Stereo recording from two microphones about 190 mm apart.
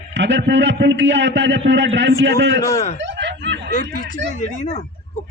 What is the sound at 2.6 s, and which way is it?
Speech, 15° left (ahead or behind).